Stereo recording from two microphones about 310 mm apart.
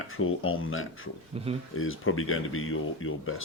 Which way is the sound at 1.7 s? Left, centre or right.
Left.